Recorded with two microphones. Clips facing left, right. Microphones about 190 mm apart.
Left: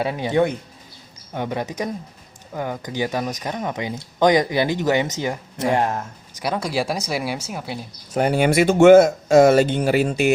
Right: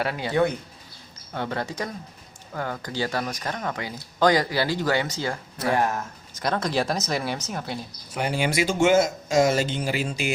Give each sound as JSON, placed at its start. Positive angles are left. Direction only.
{"t": 0.0, "sound": "speech", "side_deg": 20}
{"t": 6.4, "sound": "speech", "side_deg": 10}
{"t": 8.1, "sound": "speech", "side_deg": 50}